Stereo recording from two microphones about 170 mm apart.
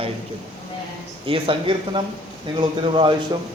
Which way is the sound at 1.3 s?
30° right (ahead or behind).